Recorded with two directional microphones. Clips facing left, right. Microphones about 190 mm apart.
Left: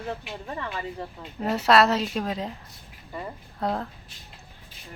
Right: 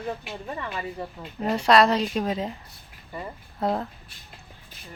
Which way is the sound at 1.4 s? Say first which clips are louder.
Right 1 dB; 5° left (ahead or behind).